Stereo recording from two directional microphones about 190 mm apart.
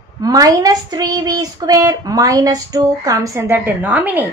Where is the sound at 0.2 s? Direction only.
20° right (ahead or behind).